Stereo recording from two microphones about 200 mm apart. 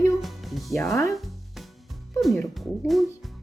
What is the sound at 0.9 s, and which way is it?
Speech, 15° left (ahead or behind).